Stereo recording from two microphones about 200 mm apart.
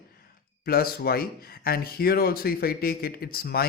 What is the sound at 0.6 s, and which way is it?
Speech, 50° left (ahead or behind).